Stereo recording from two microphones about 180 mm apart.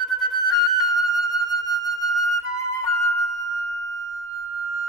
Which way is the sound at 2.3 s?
15° left (ahead or behind).